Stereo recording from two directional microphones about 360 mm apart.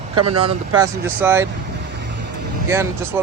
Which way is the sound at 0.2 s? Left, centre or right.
Right.